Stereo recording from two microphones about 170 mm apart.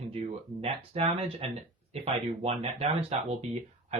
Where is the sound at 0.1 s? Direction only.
35° right (ahead or behind).